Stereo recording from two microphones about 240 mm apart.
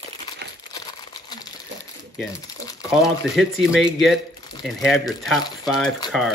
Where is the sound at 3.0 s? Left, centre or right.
Centre.